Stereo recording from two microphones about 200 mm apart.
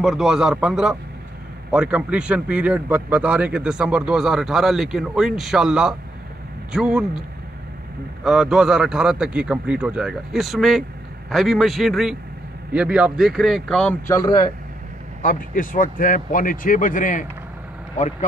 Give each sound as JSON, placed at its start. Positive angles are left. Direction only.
{"t": 0.0, "sound": "a man's voice", "side_deg": 0}
{"t": 8.2, "sound": "a man's voice", "side_deg": 0}
{"t": 15.2, "sound": "speech", "side_deg": 45}